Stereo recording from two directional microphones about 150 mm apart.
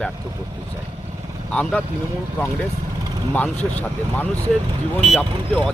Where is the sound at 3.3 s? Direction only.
10° left (ahead or behind).